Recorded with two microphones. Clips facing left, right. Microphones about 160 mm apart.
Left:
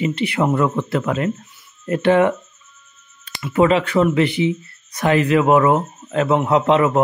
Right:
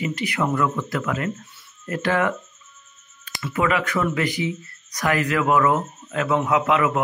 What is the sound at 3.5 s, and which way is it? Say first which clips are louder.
Speech: left 7 dB; 30° left (ahead or behind).